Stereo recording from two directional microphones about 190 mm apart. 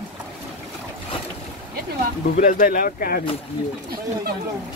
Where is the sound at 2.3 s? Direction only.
45° left (ahead or behind).